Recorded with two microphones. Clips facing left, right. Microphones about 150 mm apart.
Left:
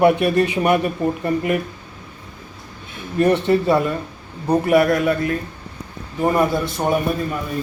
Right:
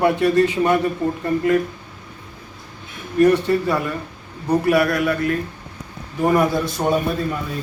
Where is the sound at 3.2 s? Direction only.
20° left (ahead or behind).